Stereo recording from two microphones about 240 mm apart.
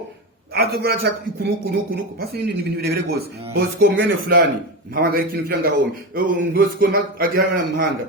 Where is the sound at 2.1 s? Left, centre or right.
Right.